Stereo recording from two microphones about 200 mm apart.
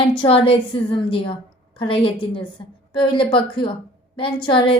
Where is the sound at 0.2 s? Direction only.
30° left (ahead or behind).